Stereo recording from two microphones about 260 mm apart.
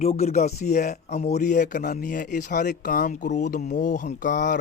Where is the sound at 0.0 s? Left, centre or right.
Left.